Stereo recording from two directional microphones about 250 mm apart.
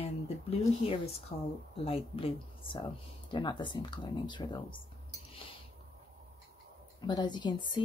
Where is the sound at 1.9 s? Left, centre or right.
Left.